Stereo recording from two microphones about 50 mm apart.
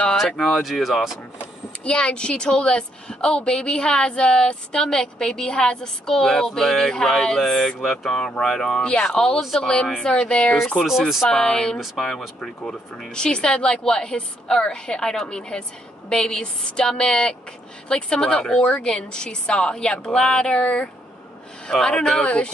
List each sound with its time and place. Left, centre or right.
0.2 s speech: centre
1.9 s a woman's voice: centre
10.9 s speech: centre
11.2 s a woman's voice: centre